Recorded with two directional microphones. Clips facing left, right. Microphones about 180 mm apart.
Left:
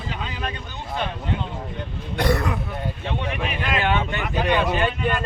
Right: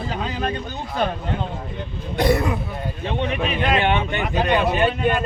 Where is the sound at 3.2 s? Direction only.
25° right (ahead or behind).